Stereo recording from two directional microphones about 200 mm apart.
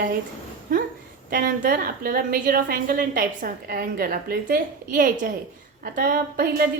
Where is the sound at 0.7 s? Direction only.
45° right (ahead or behind).